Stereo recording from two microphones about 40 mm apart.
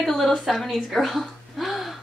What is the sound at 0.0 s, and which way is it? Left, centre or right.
A woman's voice, centre.